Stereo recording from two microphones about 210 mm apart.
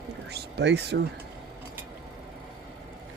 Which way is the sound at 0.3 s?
55° right (ahead or behind).